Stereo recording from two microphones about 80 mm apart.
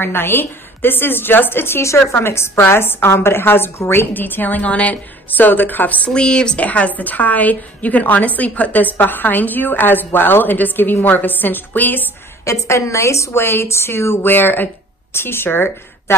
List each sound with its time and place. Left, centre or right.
0.0 s a woman's voice: left
12.4 s a woman's voice: left